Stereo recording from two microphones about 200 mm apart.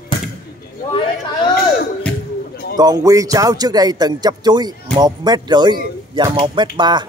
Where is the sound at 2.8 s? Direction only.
20° right (ahead or behind).